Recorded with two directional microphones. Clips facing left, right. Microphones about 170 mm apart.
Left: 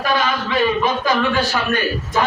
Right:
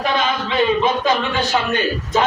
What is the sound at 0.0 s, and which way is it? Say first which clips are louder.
A man's voice: even; 20° right (ahead or behind).